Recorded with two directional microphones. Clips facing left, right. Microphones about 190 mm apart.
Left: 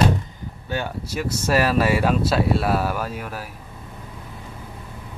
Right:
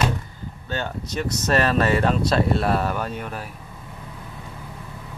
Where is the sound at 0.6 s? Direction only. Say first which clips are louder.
Left 1 dB; 10° left (ahead or behind).